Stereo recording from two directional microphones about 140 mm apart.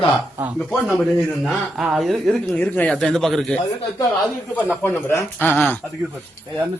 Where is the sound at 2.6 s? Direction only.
10° left (ahead or behind).